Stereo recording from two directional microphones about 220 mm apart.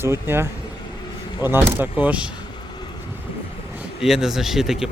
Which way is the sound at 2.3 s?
20° left (ahead or behind).